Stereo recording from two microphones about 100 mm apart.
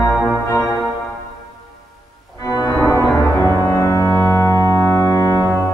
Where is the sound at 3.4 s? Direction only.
30° left (ahead or behind).